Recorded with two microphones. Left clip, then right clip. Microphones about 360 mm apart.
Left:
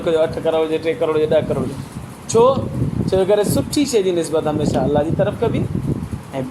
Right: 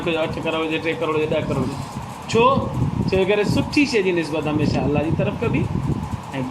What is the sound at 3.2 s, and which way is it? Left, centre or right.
Speech, centre.